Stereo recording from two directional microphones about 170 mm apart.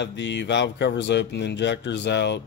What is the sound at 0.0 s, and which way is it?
Speech, 90° left.